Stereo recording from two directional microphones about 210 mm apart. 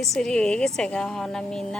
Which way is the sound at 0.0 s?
Centre (ahead or behind).